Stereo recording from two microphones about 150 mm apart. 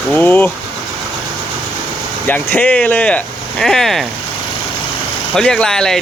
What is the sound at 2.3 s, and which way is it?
Speech, 10° left (ahead or behind).